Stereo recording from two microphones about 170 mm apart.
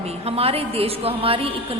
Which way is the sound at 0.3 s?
35° right (ahead or behind).